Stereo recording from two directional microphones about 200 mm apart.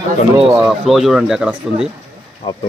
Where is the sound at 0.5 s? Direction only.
Centre (ahead or behind).